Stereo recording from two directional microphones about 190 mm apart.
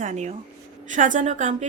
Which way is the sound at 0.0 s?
40° right (ahead or behind).